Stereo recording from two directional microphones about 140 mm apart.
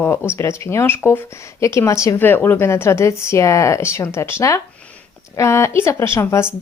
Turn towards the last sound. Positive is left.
turn(degrees=15)  # may be behind; listen again after turning